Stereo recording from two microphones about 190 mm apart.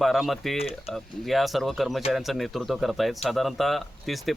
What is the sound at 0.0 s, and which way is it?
A man's voice, centre (ahead or behind).